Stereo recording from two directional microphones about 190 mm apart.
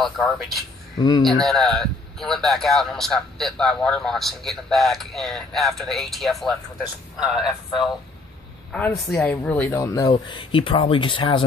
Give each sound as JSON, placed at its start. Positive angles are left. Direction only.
{"t": 0.0, "sound": "a man's voice", "side_deg": 0}
{"t": 0.9, "sound": "speech", "side_deg": 20}
{"t": 1.4, "sound": "a man's voice", "side_deg": 0}
{"t": 8.7, "sound": "speech", "side_deg": 10}